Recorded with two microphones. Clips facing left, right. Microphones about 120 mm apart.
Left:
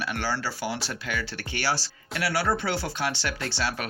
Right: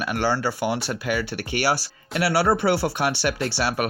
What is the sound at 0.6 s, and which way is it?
Speech, 60° right (ahead or behind).